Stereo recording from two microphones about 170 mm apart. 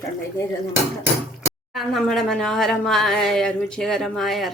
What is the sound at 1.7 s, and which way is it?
Speech, centre (ahead or behind).